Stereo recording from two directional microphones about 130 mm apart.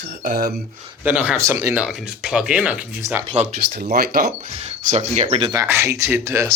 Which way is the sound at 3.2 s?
55° right (ahead or behind).